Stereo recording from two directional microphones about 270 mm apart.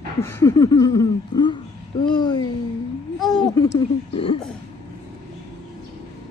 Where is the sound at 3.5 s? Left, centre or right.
Centre.